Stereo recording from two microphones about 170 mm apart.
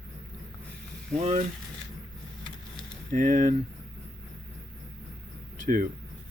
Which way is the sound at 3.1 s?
50° right (ahead or behind).